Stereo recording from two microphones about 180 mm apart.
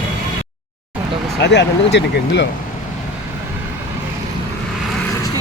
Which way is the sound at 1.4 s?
75° left (ahead or behind).